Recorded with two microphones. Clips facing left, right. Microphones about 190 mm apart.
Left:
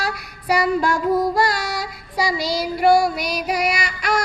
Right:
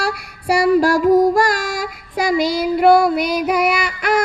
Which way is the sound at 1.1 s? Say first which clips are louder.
Right 6 dB; 45° right (ahead or behind).